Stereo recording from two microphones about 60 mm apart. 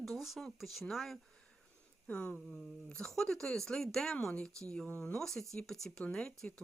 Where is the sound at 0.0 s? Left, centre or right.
Centre.